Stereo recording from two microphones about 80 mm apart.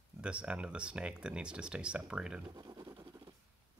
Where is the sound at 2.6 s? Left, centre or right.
Right.